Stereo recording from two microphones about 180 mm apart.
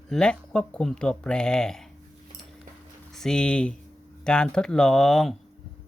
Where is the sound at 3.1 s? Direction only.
5° left (ahead or behind).